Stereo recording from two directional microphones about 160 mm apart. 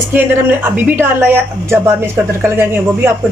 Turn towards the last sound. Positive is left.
turn(degrees=-15)  # may be behind; listen again after turning